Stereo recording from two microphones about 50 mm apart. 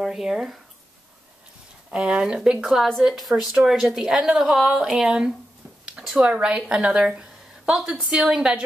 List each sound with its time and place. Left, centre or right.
0.0 s a woman's voice: centre
1.9 s a woman's voice: centre
3.0 s a woman's voice: centre